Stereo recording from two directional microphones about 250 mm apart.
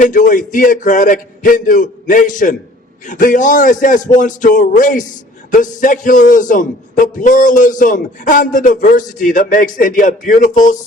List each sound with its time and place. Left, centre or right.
0.0 s speech: left